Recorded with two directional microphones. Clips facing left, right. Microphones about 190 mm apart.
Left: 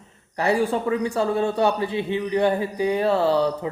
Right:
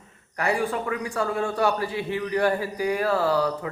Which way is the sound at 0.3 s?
25° left (ahead or behind).